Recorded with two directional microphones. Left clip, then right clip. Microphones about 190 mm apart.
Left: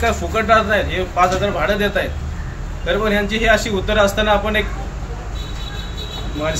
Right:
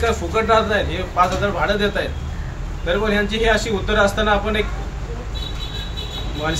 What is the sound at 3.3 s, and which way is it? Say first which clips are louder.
Speech: left 2 dB; 10° right (ahead or behind).